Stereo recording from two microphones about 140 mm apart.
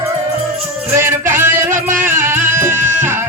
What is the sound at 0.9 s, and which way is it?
Music, 15° right (ahead or behind).